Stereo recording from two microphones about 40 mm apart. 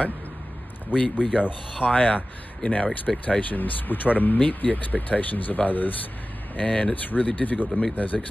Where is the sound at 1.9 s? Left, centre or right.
Left.